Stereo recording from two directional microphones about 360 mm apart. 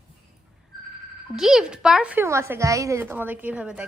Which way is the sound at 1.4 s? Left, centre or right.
Centre.